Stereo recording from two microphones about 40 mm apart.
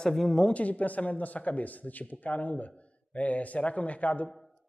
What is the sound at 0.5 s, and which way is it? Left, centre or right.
Speech, left.